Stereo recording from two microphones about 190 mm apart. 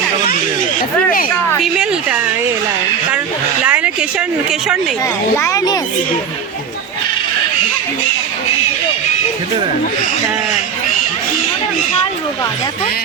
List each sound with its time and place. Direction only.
1.6 s speech: 5° right (ahead or behind)
3.6 s a sound: 5° right (ahead or behind)
5.4 s speech: 15° left (ahead or behind)